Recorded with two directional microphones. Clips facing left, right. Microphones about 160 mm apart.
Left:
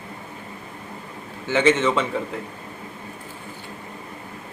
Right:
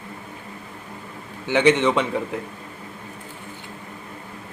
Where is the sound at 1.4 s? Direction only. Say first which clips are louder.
Right 1 dB; 15° right (ahead or behind).